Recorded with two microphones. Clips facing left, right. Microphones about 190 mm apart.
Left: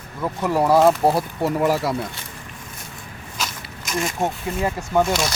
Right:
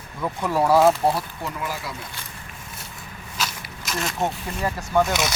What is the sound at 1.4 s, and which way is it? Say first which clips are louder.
Speech: left 11 dB; 70° left (ahead or behind).